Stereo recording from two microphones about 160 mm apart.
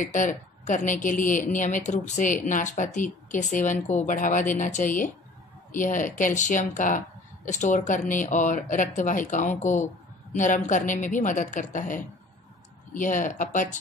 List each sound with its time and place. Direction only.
0.0 s a woman's voice: 55° left (ahead or behind)